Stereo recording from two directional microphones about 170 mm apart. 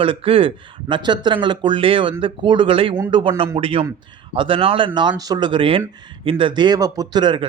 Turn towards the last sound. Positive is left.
turn(degrees=-25)  # may be behind; listen again after turning